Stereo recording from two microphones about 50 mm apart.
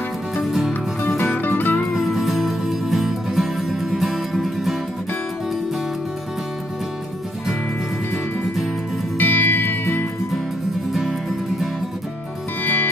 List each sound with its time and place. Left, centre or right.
0.4 s music: centre
1.0 s music: left
2.0 s music: centre
9.2 s music: left
10.9 s music: centre
12.6 s music: left